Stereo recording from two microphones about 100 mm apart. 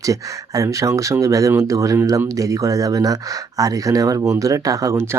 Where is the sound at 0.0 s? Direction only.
35° right (ahead or behind).